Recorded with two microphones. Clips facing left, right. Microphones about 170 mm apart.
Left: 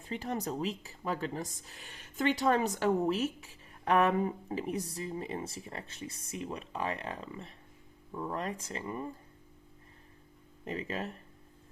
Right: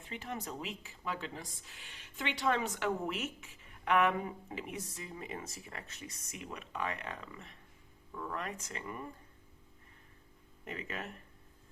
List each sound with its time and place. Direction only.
0.0 s speech: 40° left (ahead or behind)
10.7 s speech: 30° left (ahead or behind)